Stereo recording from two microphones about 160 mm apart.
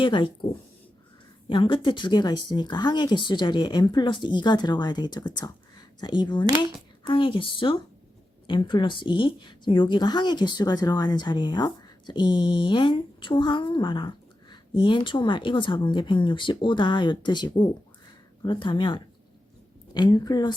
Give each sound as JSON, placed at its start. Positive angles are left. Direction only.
{"t": 0.0, "sound": "speech", "side_deg": 30}
{"t": 1.5, "sound": "a woman's voice", "side_deg": 30}